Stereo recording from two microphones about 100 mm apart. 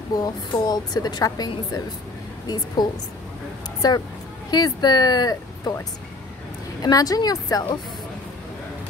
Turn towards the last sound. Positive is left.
turn(degrees=40)  # may be behind; listen again after turning